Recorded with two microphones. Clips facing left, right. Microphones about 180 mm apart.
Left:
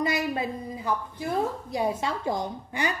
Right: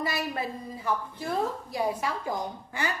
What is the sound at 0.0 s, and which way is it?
A woman's voice, 20° left (ahead or behind).